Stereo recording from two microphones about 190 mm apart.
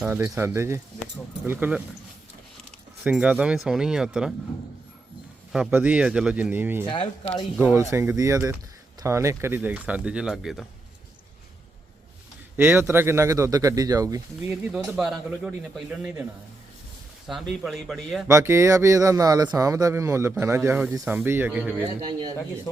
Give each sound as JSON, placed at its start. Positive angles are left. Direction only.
{"t": 0.0, "sound": "speech", "side_deg": -5}
{"t": 3.0, "sound": "speech", "side_deg": -5}
{"t": 5.5, "sound": "speech", "side_deg": -5}
{"t": 6.8, "sound": "speech", "side_deg": 25}
{"t": 7.5, "sound": "speech", "side_deg": -10}
{"t": 12.5, "sound": "speech", "side_deg": -10}
{"t": 14.9, "sound": "speech", "side_deg": 0}
{"t": 17.2, "sound": "speech", "side_deg": 0}
{"t": 18.3, "sound": "speech", "side_deg": -15}